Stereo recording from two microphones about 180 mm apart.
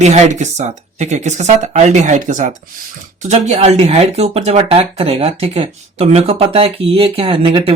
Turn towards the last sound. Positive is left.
turn(degrees=-30)  # may be behind; listen again after turning